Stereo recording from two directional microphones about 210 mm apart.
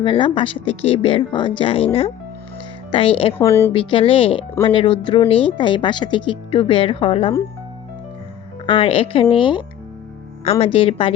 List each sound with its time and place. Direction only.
0.0 s speech: 20° left (ahead or behind)
3.3 s speech: 10° left (ahead or behind)
3.7 s speech: 25° left (ahead or behind)
8.6 s speech: 25° left (ahead or behind)